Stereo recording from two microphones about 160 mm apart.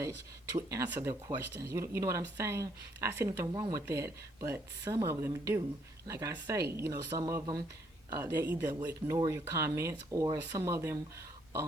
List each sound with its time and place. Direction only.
0.5 s speech: 20° right (ahead or behind)